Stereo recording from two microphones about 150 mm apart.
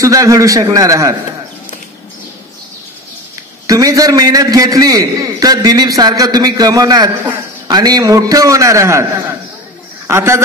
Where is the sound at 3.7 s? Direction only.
25° right (ahead or behind).